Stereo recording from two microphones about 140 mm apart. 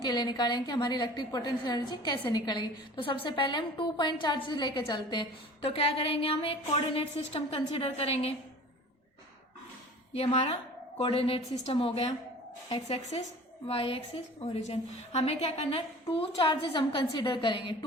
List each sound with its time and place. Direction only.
0.0 s a woman's voice: 30° left (ahead or behind)
6.2 s a woman's voice: 45° left (ahead or behind)
10.1 s a woman's voice: 45° left (ahead or behind)